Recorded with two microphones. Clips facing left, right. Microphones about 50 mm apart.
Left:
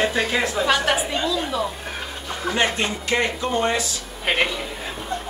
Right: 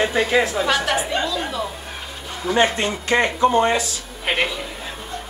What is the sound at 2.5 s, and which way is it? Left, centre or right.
Speech, right.